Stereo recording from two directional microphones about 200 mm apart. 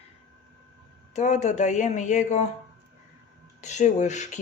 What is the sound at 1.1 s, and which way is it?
Speech, 35° left (ahead or behind).